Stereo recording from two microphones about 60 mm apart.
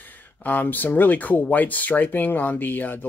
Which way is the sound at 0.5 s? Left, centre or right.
Left.